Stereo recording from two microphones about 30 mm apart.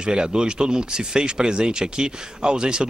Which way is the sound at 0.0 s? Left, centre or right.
Right.